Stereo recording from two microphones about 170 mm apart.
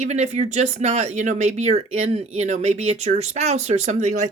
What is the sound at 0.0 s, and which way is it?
Speech, 40° right (ahead or behind).